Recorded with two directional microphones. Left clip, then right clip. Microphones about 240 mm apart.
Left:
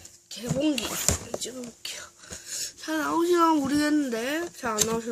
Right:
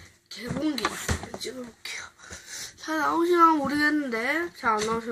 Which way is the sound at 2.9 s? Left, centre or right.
Left.